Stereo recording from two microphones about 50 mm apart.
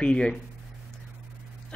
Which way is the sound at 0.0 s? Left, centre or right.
Centre.